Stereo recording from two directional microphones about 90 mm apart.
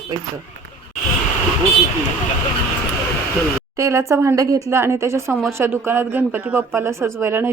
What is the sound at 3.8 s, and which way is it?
A woman's voice, 30° right (ahead or behind).